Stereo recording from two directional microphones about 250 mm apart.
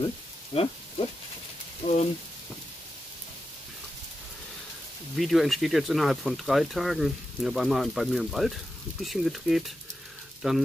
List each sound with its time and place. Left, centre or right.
0.5 s speech: left
1.8 s speech: left
5.1 s speech: centre